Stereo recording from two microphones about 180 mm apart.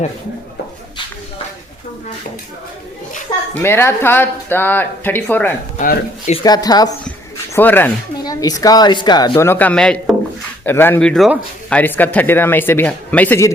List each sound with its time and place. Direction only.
3.5 s speech: 15° left (ahead or behind)
5.8 s speech: 50° left (ahead or behind)
6.4 s a woman's voice: 20° left (ahead or behind)
7.5 s a woman's voice: 10° left (ahead or behind)